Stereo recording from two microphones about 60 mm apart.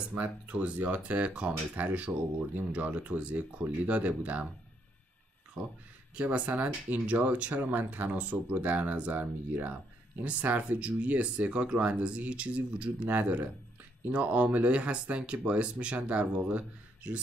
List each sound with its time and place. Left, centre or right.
0.1 s speech: right
6.1 s speech: right